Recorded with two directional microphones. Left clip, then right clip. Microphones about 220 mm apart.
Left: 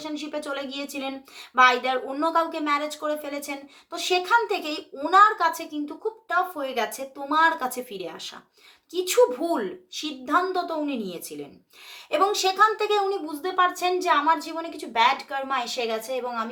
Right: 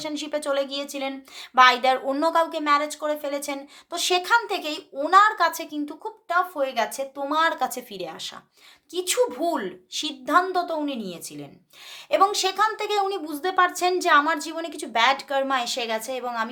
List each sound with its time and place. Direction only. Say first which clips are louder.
0.0 s speech: right 4 dB; 40° right (ahead or behind)
13.4 s a woman's voice: right 2 dB; 45° right (ahead or behind)